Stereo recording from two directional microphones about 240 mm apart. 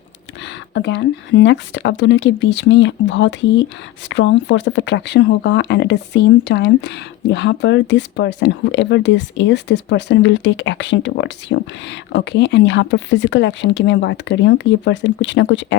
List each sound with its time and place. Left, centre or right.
0.4 s speech: left